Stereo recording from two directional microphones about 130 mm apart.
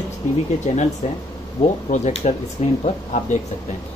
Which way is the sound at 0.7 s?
65° left (ahead or behind).